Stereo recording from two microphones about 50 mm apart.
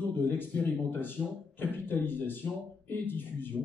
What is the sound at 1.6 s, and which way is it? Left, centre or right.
Speech, left.